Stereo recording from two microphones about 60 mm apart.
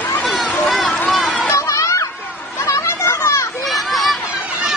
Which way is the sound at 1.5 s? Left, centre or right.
Left.